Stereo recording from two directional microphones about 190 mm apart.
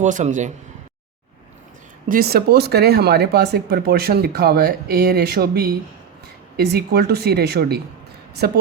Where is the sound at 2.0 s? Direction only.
50° right (ahead or behind).